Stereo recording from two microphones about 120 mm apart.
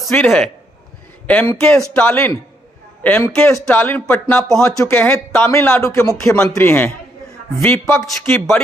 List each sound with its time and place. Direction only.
0.1 s a man's voice: 15° left (ahead or behind)
5.0 s speech: 15° left (ahead or behind)